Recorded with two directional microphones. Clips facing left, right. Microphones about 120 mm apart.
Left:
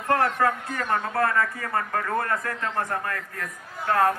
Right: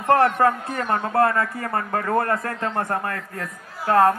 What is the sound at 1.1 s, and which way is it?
A man's voice, 30° right (ahead or behind).